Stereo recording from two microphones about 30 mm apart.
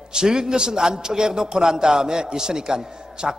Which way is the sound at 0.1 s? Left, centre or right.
Right.